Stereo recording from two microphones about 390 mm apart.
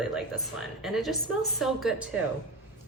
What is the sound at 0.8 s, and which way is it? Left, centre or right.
Speech, centre.